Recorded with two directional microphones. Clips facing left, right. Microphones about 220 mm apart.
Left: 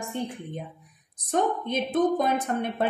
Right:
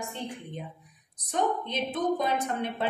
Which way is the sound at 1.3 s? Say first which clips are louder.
Left 3 dB; 50° left (ahead or behind).